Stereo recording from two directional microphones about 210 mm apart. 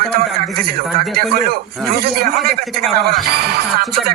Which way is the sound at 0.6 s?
45° right (ahead or behind).